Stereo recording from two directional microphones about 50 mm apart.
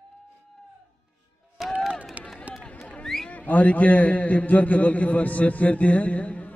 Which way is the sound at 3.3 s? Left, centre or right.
Left.